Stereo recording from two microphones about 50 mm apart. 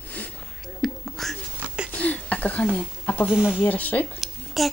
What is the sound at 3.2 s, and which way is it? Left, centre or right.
Speech, centre.